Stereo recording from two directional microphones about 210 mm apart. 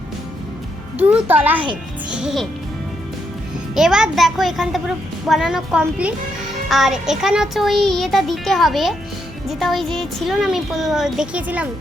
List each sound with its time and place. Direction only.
0.9 s a child's voice: 5° right (ahead or behind)
3.8 s speech: 5° right (ahead or behind)